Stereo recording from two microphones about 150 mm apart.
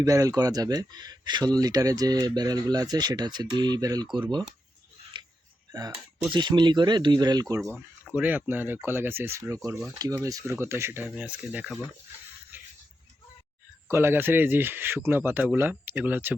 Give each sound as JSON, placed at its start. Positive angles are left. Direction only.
{"t": 0.0, "sound": "speech", "side_deg": -20}
{"t": 6.3, "sound": "speech", "side_deg": -30}
{"t": 8.0, "sound": "speech", "side_deg": -10}
{"t": 12.5, "sound": "music", "side_deg": -15}
{"t": 13.9, "sound": "speech", "side_deg": -15}